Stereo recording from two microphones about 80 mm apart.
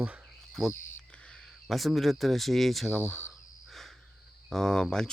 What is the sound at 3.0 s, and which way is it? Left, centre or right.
Speech, right.